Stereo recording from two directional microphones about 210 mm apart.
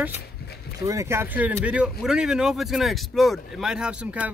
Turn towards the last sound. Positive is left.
turn(degrees=-5)  # may be behind; listen again after turning